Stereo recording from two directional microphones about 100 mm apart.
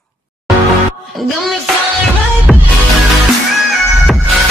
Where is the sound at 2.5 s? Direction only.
Centre (ahead or behind).